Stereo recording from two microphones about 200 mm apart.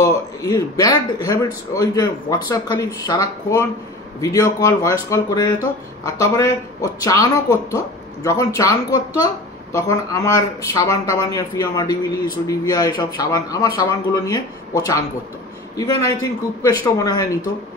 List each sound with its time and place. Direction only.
0.0 s speech: 15° left (ahead or behind)